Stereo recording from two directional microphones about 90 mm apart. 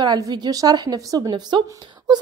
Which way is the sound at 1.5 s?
65° right (ahead or behind).